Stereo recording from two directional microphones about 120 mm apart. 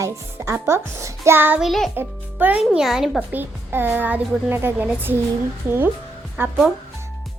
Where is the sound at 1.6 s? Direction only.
Centre (ahead or behind).